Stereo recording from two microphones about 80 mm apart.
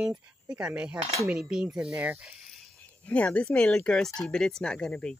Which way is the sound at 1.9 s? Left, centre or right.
Right.